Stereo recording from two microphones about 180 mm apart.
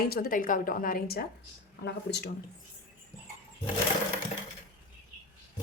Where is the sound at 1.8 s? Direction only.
65° left (ahead or behind).